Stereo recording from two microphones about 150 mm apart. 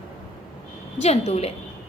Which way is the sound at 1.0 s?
45° left (ahead or behind).